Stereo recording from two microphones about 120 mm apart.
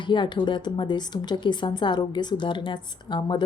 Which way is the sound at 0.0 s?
40° left (ahead or behind).